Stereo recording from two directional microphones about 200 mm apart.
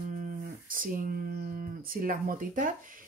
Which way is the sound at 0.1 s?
40° right (ahead or behind).